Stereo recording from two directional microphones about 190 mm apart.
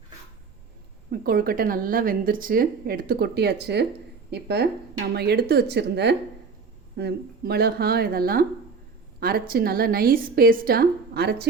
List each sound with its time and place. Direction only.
1.1 s a woman's voice: 50° right (ahead or behind)